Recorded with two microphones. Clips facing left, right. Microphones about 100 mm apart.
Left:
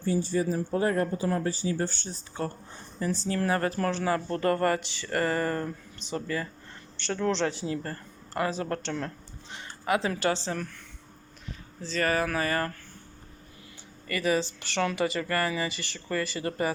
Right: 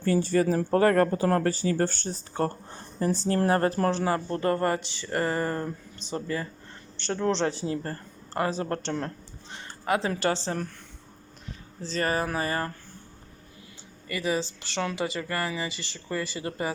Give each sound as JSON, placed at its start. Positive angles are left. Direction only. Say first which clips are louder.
{"t": 0.0, "sound": "speech", "louder": "right 4 dB", "side_deg": -65}
{"t": 11.8, "sound": "speech", "louder": "even", "side_deg": -30}
{"t": 14.1, "sound": "speech", "louder": "left 2 dB", "side_deg": -20}